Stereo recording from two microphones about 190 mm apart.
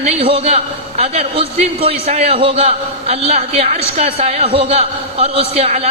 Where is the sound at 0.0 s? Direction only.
30° right (ahead or behind).